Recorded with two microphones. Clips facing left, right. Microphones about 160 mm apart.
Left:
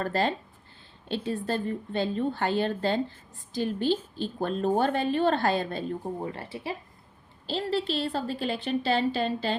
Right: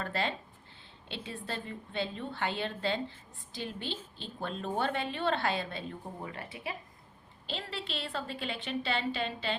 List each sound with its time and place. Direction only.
0.0 s a woman's voice: 40° left (ahead or behind)